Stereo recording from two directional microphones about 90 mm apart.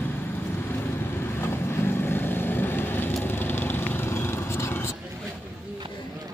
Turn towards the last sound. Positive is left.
turn(degrees=30)  # may be behind; listen again after turning